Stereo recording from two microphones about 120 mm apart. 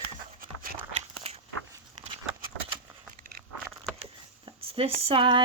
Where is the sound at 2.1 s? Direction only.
45° right (ahead or behind).